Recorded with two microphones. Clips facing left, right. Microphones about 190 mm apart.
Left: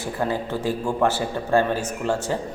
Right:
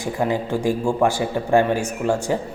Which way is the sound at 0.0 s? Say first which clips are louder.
Right 3 dB; 15° right (ahead or behind).